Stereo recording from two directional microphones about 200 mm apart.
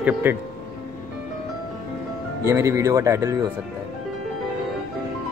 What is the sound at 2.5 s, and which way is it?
Speech, 15° right (ahead or behind).